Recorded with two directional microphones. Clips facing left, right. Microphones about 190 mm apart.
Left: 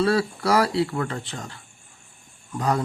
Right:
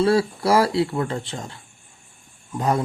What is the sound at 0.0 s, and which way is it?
Speech, 25° right (ahead or behind).